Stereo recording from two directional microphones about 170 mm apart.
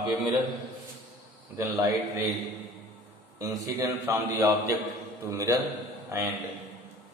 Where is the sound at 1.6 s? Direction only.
15° right (ahead or behind).